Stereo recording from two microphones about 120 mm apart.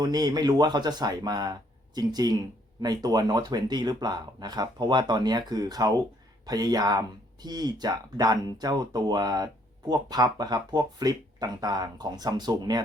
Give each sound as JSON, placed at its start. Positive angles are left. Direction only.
{"t": 0.0, "sound": "speech", "side_deg": -35}